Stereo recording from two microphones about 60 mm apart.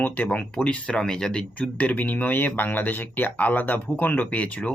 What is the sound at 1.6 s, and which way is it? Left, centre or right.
Speech, left.